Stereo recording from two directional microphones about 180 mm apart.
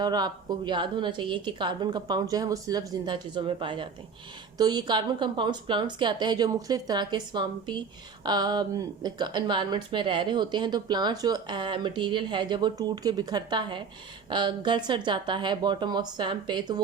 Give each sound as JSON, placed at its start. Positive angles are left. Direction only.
{"t": 0.0, "sound": "a woman's voice", "side_deg": -20}